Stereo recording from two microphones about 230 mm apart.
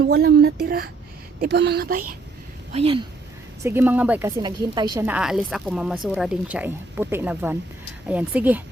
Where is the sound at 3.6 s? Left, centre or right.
Centre.